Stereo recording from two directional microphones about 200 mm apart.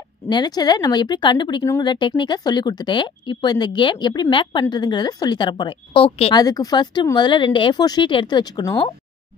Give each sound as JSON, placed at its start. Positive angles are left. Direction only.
{"t": 0.3, "sound": "speech", "side_deg": 20}
{"t": 6.4, "sound": "speech", "side_deg": 20}